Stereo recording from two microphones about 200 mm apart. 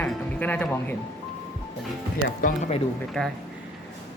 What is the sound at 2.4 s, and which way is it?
Speech, 35° left (ahead or behind).